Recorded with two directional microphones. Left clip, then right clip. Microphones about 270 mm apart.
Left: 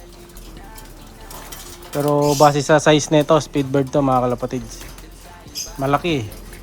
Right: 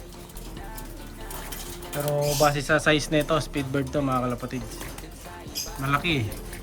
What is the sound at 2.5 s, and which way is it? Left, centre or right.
Speech, centre.